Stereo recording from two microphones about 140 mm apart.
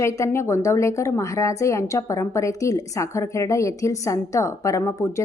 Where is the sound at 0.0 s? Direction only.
20° left (ahead or behind).